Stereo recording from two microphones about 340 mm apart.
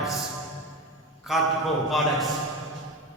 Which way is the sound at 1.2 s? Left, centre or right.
Centre.